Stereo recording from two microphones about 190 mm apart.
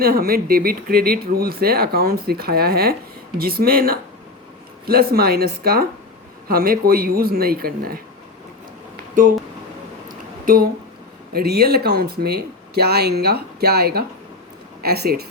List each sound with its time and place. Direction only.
0.0 s speech: 50° right (ahead or behind)
10.4 s speech: 50° right (ahead or behind)